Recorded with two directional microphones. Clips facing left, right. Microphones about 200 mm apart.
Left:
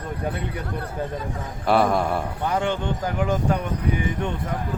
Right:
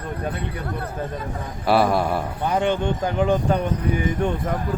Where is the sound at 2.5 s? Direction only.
20° right (ahead or behind).